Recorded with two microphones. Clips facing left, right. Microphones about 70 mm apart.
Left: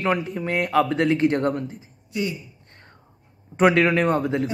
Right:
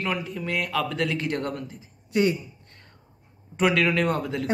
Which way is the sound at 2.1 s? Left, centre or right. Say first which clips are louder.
Right 5 dB; right.